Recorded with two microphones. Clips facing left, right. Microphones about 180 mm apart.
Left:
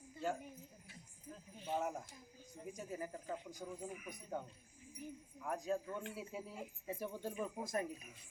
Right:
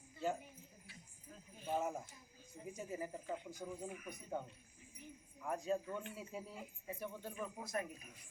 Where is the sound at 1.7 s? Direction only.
5° right (ahead or behind).